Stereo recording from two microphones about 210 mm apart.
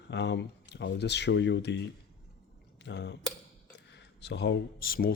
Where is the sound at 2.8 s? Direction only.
55° left (ahead or behind).